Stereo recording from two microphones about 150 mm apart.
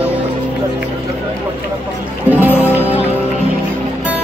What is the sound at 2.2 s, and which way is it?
Music, 10° right (ahead or behind).